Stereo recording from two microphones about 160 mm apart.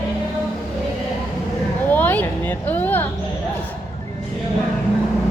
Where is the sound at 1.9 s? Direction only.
10° left (ahead or behind).